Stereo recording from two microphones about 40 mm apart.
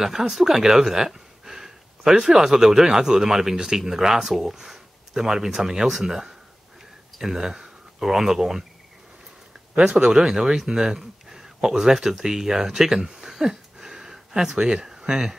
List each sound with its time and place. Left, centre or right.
0.0 s speech: centre
9.8 s speech: right